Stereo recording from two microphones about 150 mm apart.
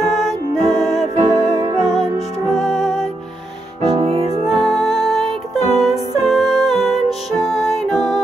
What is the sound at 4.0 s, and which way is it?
Music, 40° right (ahead or behind).